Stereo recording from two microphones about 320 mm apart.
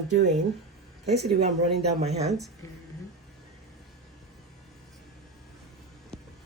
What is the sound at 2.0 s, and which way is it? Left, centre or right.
Speech, centre.